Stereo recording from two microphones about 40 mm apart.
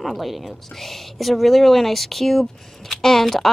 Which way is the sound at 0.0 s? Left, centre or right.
Centre.